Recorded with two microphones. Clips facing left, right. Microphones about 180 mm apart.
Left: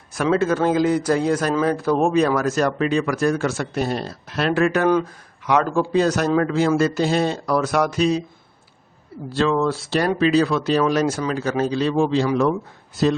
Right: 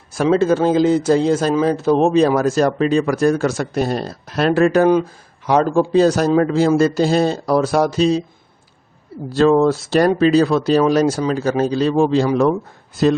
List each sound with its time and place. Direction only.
0.1 s a man's voice: 30° right (ahead or behind)
9.3 s a man's voice: 40° right (ahead or behind)